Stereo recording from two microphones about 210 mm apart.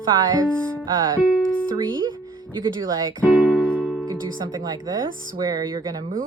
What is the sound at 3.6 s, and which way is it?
Music, 5° left (ahead or behind).